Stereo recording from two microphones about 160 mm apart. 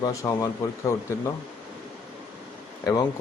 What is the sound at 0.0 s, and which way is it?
Speech, 20° left (ahead or behind).